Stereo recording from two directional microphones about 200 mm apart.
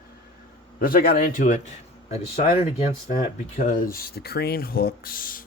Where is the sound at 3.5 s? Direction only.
40° left (ahead or behind).